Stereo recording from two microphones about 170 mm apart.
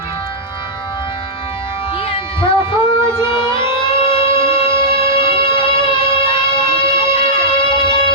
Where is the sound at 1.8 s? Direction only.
35° left (ahead or behind).